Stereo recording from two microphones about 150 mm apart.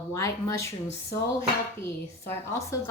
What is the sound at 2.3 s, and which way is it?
Speech, 20° left (ahead or behind).